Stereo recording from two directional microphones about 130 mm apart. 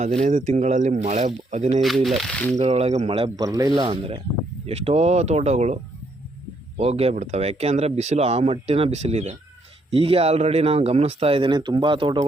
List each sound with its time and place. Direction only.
0.2 s speech: 65° right (ahead or behind)
1.8 s speech: centre (ahead or behind)
2.6 s speech: 55° right (ahead or behind)
3.3 s speech: 25° right (ahead or behind)
4.6 s speech: 50° right (ahead or behind)